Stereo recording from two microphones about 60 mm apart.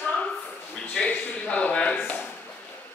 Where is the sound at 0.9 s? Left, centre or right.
Centre.